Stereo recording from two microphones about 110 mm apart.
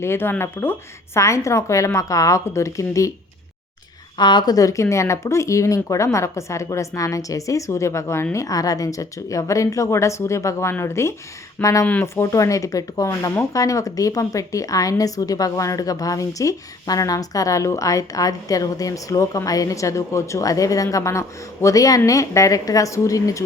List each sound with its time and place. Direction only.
0.0 s speech: 20° left (ahead or behind)
4.2 s a woman's voice: 45° left (ahead or behind)